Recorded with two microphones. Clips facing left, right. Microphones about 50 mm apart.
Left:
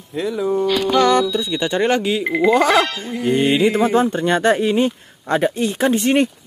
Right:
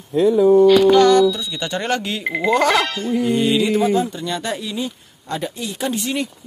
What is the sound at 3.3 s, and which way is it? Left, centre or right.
Speech, left.